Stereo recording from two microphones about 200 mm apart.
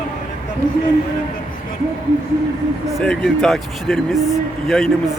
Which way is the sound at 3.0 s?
5° left (ahead or behind).